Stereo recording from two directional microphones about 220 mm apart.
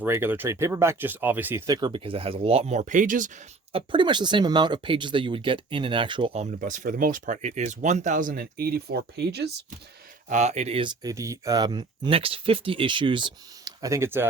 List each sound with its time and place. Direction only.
0.0 s speech: 10° right (ahead or behind); by 9.6 s 50° right (ahead or behind)
10.2 s speech: 30° right (ahead or behind); by 14.3 s 10° right (ahead or behind)